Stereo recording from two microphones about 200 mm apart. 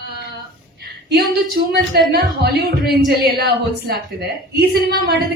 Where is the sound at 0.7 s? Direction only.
55° right (ahead or behind).